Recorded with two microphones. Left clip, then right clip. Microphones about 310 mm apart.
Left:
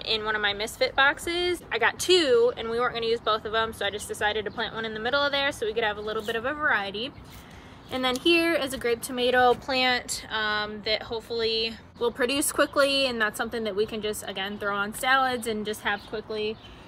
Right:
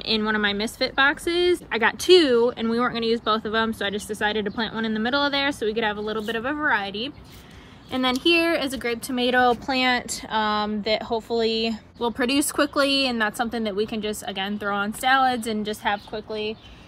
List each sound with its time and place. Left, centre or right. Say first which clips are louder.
0.0 s speech: right 3 dB; right
7.9 s speech: right 3 dB; centre
12.0 s a woman's voice: right 2 dB; centre